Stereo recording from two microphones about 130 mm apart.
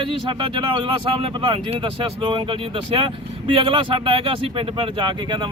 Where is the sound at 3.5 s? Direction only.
45° right (ahead or behind).